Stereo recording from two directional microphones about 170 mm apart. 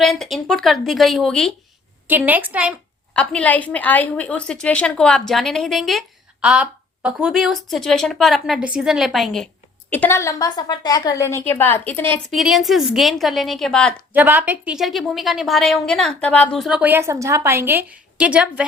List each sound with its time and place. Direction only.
0.0 s a woman's voice: centre (ahead or behind)
2.0 s a woman's voice: 10° right (ahead or behind)
3.1 s a woman's voice: 5° left (ahead or behind)
9.9 s a woman's voice: 15° left (ahead or behind)
12.3 s a woman's voice: centre (ahead or behind)
14.1 s a woman's voice: 10° right (ahead or behind)